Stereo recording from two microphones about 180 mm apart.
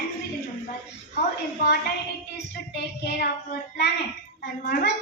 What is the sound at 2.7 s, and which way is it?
Speech, 65° left (ahead or behind).